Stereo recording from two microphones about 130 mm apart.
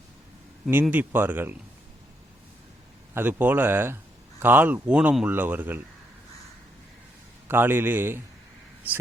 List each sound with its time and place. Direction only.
0.7 s speech: 15° right (ahead or behind)
3.2 s speech: 15° right (ahead or behind)
7.4 s speech: 15° right (ahead or behind)